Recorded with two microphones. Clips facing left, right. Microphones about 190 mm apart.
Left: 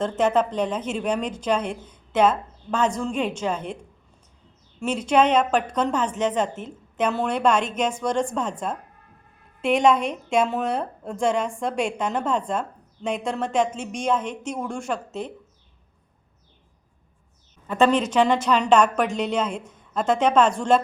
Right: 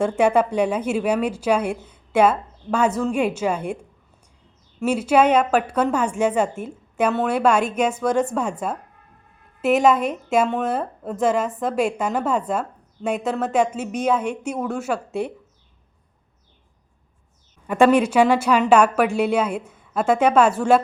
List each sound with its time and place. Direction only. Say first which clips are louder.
0.0 s a woman's voice: right 3 dB; 10° right (ahead or behind)
17.7 s a woman's voice: right 4 dB; 10° right (ahead or behind)